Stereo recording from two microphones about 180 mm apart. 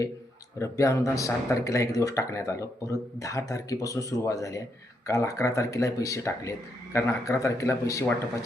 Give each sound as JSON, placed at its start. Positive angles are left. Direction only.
{"t": 0.6, "sound": "speech", "side_deg": 15}